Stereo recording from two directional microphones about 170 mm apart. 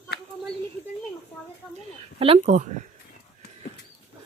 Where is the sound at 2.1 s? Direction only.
35° right (ahead or behind).